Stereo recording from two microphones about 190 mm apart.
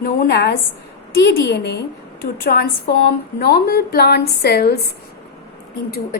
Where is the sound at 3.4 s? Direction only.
55° left (ahead or behind).